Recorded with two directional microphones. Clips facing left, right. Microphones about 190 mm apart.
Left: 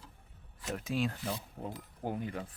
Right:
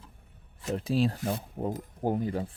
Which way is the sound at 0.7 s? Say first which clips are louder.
Right 7 dB; 30° right (ahead or behind).